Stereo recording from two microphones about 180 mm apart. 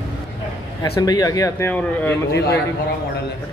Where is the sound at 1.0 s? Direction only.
20° left (ahead or behind).